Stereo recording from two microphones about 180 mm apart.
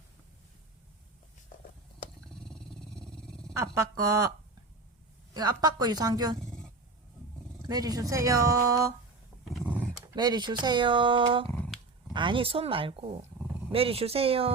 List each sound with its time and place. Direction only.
2.3 s dog: 5° left (ahead or behind)
3.5 s speech: 20° right (ahead or behind)
5.3 s speech: 25° right (ahead or behind)
7.6 s speech: 20° right (ahead or behind)
9.4 s a sound: centre (ahead or behind)
10.2 s a woman's voice: 25° right (ahead or behind)